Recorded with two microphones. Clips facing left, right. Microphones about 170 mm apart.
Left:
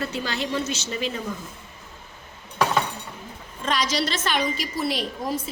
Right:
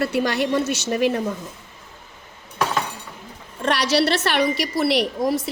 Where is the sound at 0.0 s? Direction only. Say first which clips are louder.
Right 7 dB; 65° right (ahead or behind).